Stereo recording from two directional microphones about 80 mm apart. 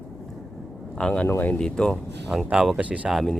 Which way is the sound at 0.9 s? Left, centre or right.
Centre.